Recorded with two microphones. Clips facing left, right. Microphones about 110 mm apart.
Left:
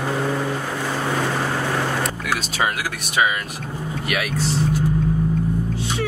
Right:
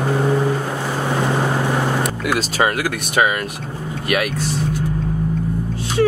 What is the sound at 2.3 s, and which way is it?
Speech, 35° right (ahead or behind).